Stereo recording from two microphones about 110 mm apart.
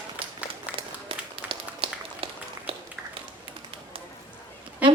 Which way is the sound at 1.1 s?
55° right (ahead or behind).